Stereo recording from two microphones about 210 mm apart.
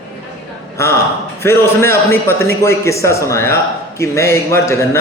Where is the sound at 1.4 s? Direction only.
10° left (ahead or behind).